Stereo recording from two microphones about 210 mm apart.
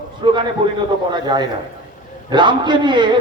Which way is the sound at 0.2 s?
20° right (ahead or behind).